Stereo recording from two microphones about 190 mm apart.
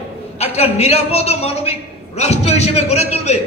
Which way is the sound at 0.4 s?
35° left (ahead or behind).